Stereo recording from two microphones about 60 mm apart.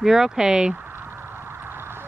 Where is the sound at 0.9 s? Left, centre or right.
Right.